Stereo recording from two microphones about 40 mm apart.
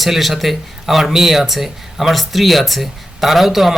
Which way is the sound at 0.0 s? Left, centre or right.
Centre.